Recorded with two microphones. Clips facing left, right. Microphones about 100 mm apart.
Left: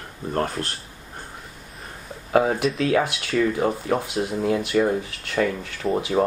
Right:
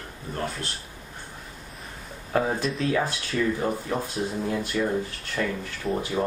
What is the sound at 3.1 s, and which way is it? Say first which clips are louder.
Speech: left 4 dB; 85° left.